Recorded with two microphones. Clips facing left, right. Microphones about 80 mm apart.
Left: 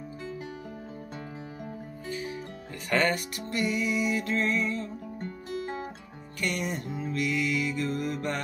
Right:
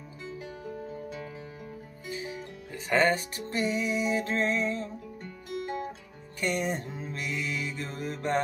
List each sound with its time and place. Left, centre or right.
2.9 s music: right
6.4 s music: right